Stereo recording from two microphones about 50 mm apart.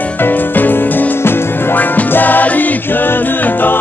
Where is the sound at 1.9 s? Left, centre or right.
Left.